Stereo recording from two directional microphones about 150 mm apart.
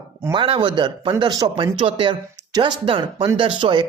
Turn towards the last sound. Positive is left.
turn(degrees=-30)  # may be behind; listen again after turning